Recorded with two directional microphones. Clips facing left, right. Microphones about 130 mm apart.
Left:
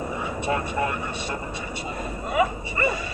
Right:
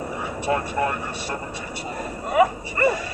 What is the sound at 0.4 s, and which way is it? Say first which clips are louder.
Speech: right 3 dB; 45° right (ahead or behind).